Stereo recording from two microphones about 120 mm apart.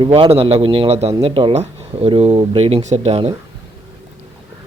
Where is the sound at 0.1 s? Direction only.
55° right (ahead or behind).